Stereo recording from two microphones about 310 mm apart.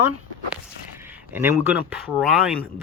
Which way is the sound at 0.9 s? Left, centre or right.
Centre.